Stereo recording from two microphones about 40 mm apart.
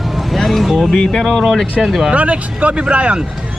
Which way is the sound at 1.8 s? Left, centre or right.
Centre.